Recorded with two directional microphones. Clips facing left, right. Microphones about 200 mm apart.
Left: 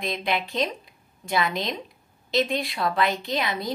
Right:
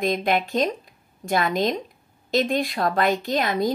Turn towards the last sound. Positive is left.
turn(degrees=-45)  # may be behind; listen again after turning